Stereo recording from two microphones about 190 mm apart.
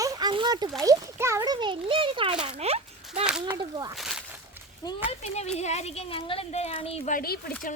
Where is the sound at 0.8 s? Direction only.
15° right (ahead or behind); by 3.2 s 35° right (ahead or behind).